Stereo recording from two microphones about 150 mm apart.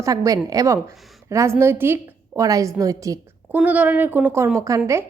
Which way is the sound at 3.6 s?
10° right (ahead or behind).